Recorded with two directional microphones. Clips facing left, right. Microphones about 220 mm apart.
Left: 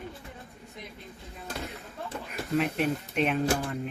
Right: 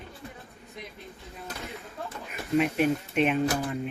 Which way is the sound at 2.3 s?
5° right (ahead or behind).